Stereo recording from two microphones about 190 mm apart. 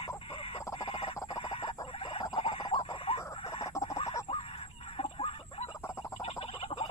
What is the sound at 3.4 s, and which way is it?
Chicken, 30° left (ahead or behind).